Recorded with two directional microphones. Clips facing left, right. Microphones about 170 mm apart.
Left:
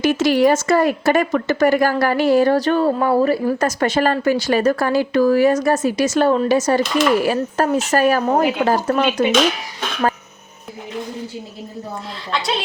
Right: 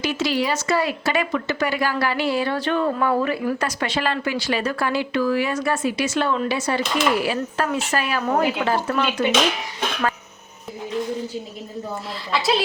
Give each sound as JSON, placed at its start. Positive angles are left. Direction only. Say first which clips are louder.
{"t": 0.0, "sound": "speech", "louder": "left 8 dB", "side_deg": 50}
{"t": 12.3, "sound": "a woman's voice", "louder": "right 1 dB", "side_deg": -5}